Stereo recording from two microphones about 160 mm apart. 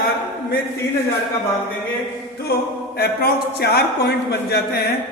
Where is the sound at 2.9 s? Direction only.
80° left.